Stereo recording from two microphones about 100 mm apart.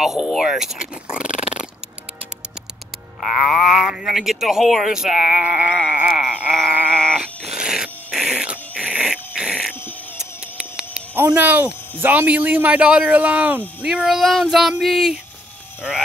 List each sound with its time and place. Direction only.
0.0 s speech: 5° right (ahead or behind)
3.2 s speech: 5° right (ahead or behind)
6.9 s sheep: 10° left (ahead or behind)
7.2 s dog: 5° right (ahead or behind)
11.3 s speech: 20° right (ahead or behind); by 15.1 s centre (ahead or behind)